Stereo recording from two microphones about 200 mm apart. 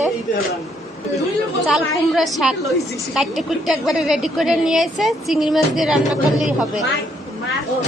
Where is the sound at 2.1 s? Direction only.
Centre (ahead or behind).